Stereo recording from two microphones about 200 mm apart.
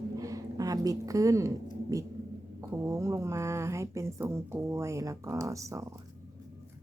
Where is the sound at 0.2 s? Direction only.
15° right (ahead or behind).